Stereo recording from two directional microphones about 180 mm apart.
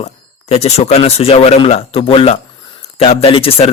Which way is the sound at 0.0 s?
35° left (ahead or behind).